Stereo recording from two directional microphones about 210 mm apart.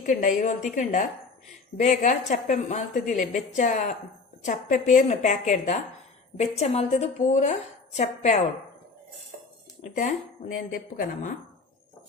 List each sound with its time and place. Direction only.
0.0 s a woman's voice: 40° left (ahead or behind)
10.5 s a woman's voice: 45° left (ahead or behind)